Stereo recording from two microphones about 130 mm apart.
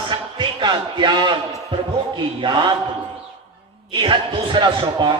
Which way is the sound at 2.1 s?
35° right (ahead or behind).